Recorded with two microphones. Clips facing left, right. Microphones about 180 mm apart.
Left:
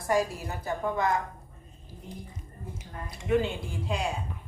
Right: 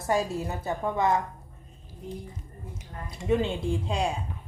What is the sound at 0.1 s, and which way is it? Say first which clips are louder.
A woman's voice: even; 20° right (ahead or behind).